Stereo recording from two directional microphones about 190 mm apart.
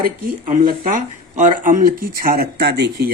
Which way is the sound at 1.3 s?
45° right (ahead or behind).